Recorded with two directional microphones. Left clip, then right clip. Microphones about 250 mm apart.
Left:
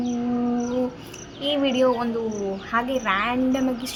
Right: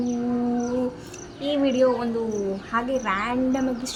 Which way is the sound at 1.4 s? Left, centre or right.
Centre.